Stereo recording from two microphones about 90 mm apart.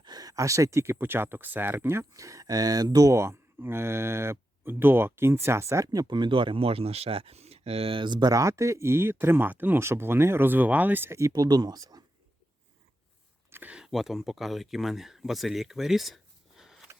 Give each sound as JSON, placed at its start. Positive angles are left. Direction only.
{"t": 0.0, "sound": "speech", "side_deg": -45}
{"t": 8.3, "sound": "speech", "side_deg": -35}
{"t": 11.3, "sound": "speech", "side_deg": -50}
{"t": 13.5, "sound": "a sound", "side_deg": -20}
{"t": 13.7, "sound": "speech", "side_deg": -5}